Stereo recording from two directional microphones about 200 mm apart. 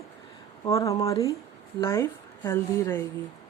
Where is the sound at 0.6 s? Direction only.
15° left (ahead or behind).